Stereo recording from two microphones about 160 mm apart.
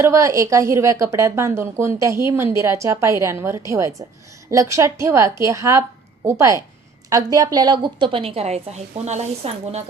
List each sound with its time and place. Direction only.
0.0 s a woman's voice: 20° right (ahead or behind); by 9.8 s 45° right (ahead or behind)